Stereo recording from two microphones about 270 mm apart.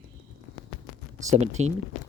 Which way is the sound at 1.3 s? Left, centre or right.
Right.